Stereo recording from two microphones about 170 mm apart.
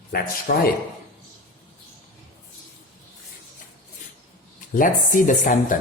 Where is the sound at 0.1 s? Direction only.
60° left (ahead or behind).